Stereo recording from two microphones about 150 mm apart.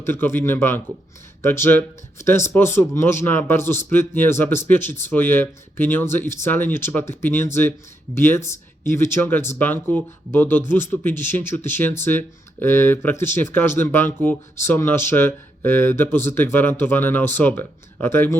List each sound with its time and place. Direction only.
0.0 s speech: 15° left (ahead or behind)